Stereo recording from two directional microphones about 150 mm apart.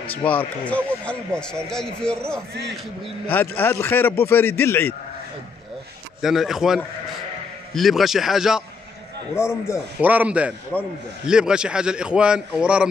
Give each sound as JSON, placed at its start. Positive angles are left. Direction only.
{"t": 0.2, "sound": "a man's voice", "side_deg": 10}
{"t": 6.2, "sound": "a man's voice", "side_deg": 0}
{"t": 9.3, "sound": "a man's voice", "side_deg": 20}
{"t": 10.0, "sound": "speech", "side_deg": -10}
{"t": 10.7, "sound": "a man's voice", "side_deg": 10}
{"t": 11.2, "sound": "a man's voice", "side_deg": -5}